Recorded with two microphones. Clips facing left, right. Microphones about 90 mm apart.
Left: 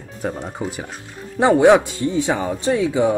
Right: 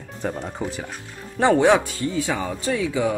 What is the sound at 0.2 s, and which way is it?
Speech, 10° left (ahead or behind).